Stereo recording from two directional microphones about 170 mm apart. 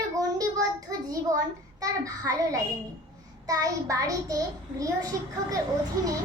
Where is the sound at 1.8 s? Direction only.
20° right (ahead or behind).